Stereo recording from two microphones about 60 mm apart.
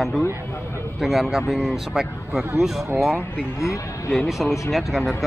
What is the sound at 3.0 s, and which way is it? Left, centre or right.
Speech, centre.